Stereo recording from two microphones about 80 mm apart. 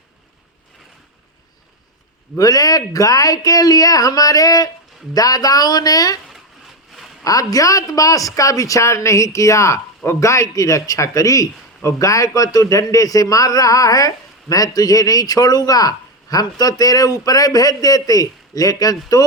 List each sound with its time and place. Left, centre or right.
2.4 s speech: left
7.3 s speech: left